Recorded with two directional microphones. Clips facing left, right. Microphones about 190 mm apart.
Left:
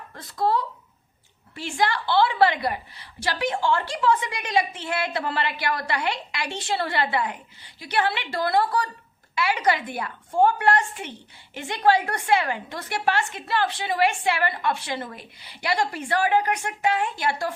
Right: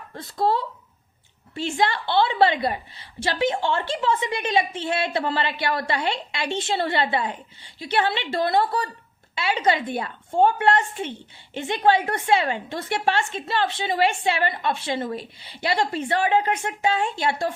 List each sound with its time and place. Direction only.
0.1 s a woman's voice: 25° right (ahead or behind)